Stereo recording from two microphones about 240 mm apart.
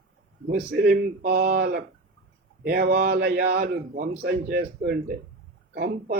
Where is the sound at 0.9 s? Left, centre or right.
Right.